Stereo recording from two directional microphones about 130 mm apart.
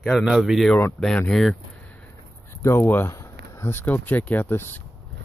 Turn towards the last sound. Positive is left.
turn(degrees=15)  # may be behind; listen again after turning